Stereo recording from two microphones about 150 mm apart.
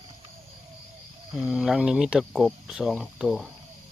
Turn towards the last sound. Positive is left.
turn(degrees=0)  # may be behind; listen again after turning